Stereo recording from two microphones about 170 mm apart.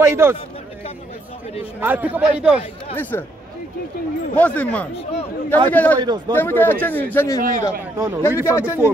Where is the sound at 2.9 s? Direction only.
10° left (ahead or behind).